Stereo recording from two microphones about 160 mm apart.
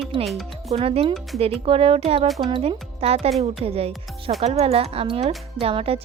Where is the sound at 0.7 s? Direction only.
35° right (ahead or behind).